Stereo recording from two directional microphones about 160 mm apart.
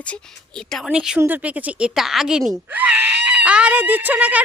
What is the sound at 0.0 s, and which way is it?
A woman's voice, 5° left (ahead or behind).